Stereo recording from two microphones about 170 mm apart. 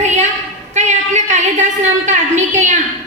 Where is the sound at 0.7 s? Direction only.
45° right (ahead or behind).